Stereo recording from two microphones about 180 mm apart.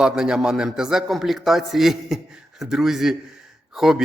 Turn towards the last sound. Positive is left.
turn(degrees=0)  # may be behind; listen again after turning